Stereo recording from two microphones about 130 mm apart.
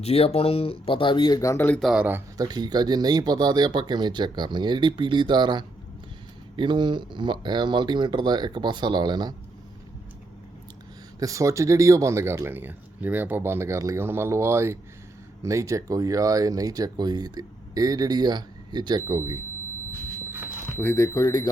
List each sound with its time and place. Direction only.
0.0 s speech: 50° left (ahead or behind)
1.4 s speech: 25° left (ahead or behind)
1.8 s speech: 5° right (ahead or behind)
2.4 s speech: 30° right (ahead or behind)
11.2 s speech: 25° right (ahead or behind)
20.7 s speech: 20° left (ahead or behind)